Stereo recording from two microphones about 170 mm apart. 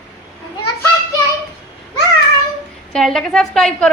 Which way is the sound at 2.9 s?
Centre (ahead or behind).